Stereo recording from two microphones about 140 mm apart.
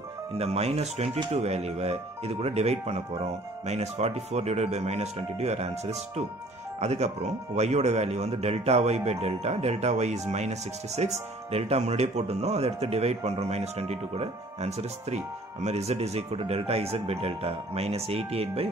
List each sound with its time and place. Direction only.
0.4 s speech: 45° right (ahead or behind)